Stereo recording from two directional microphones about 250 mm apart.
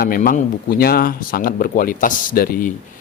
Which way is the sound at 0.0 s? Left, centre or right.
Left.